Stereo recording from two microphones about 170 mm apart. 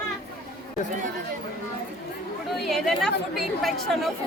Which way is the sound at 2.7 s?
Centre (ahead or behind).